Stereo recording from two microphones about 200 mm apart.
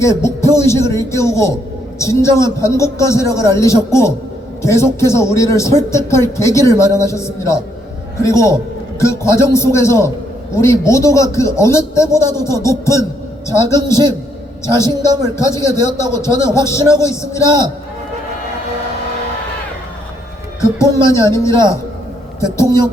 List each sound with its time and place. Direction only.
0.0 s a man's voice: 15° left (ahead or behind)
14.8 s a man's voice: 20° right (ahead or behind)
15.4 s a man's voice: 15° left (ahead or behind)
21.2 s a man's voice: 15° left (ahead or behind)